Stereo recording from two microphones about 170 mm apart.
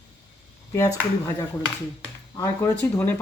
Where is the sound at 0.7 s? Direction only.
20° left (ahead or behind).